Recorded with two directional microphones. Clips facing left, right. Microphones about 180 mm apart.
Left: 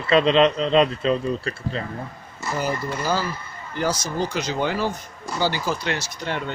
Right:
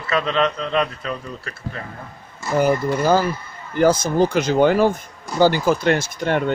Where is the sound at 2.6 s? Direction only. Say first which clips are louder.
Right 9 dB; 55° right (ahead or behind).